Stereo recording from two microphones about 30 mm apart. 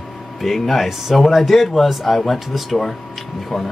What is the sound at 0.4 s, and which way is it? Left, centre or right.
A man's voice, centre.